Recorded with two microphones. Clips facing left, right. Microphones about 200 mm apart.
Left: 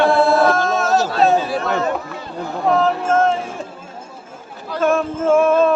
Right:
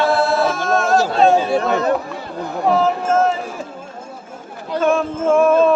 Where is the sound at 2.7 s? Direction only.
Centre (ahead or behind).